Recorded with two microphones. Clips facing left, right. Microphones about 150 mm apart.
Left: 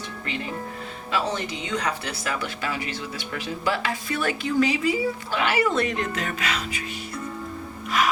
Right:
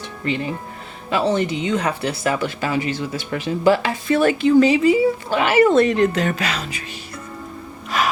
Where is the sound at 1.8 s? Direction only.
30° right (ahead or behind).